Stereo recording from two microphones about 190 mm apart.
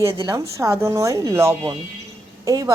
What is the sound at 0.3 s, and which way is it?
A woman's voice, 15° right (ahead or behind).